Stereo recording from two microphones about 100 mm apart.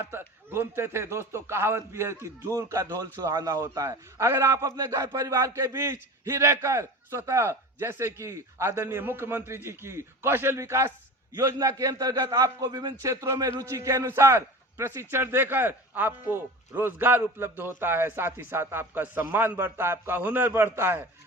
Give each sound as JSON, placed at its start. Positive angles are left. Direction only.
{"t": 0.0, "sound": "speech", "side_deg": -20}